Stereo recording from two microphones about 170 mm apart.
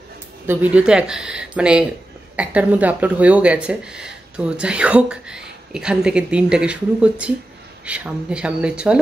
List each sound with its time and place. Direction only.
0.5 s speech: 10° right (ahead or behind)